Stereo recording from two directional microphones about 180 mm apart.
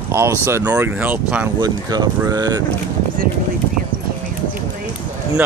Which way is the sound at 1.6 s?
20° right (ahead or behind).